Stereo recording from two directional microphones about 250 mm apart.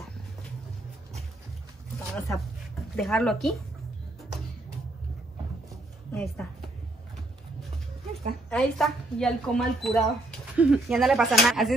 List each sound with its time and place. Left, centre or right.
2.1 s a woman's voice: centre
6.1 s a woman's voice: centre
8.5 s a woman's voice: centre